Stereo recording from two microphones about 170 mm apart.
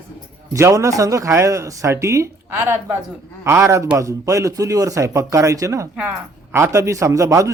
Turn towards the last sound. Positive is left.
turn(degrees=-20)  # may be behind; listen again after turning